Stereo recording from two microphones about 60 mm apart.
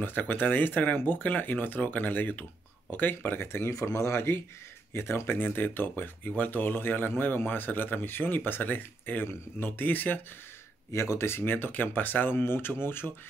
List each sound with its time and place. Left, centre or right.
0.0 s speech: left
3.7 s speech: left
10.9 s speech: left